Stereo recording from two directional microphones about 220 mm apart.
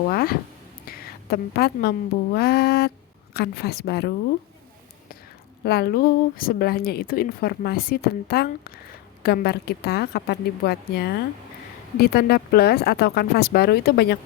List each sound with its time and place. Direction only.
0.1 s a sound: 45° left (ahead or behind)
0.9 s a woman's voice: 45° left (ahead or behind)
5.6 s a woman's voice: 45° left (ahead or behind)